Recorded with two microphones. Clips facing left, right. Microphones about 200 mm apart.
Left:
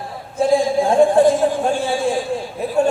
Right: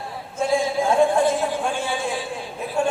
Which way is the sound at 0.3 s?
35° left (ahead or behind).